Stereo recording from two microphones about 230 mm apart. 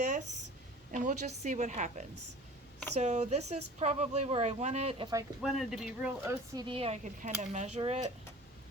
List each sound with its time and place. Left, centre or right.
0.9 s a woman's voice: right
5.4 s speech: centre
6.7 s a woman's voice: right